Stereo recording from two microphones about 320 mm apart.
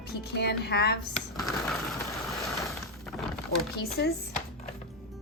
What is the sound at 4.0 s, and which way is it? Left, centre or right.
Speech, left.